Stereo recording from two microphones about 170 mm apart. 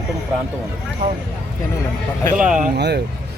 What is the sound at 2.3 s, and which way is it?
Speech, 5° right (ahead or behind).